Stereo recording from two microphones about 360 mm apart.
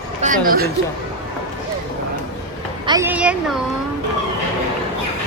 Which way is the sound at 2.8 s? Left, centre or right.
Centre.